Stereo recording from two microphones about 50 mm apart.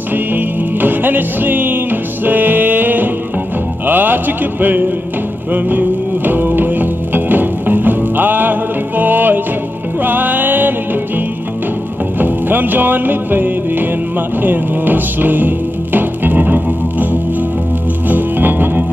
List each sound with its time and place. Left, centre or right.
0.1 s music: right
3.8 s mantra: right
5.5 s music: right
12.2 s music: right